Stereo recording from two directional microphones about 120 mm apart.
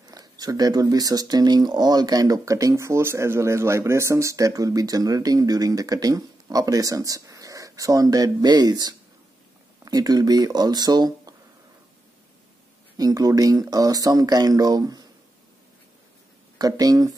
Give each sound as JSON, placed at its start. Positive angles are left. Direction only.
{"t": 0.0, "sound": "speech", "side_deg": -30}
{"t": 12.9, "sound": "speech", "side_deg": -30}
{"t": 16.5, "sound": "speech", "side_deg": -30}